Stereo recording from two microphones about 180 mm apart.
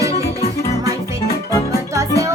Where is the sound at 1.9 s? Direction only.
15° right (ahead or behind).